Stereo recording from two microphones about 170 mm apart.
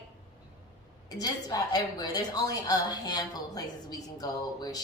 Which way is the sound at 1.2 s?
25° left (ahead or behind).